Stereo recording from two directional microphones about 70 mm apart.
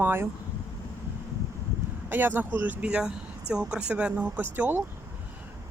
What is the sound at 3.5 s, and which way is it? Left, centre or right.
Speech, centre.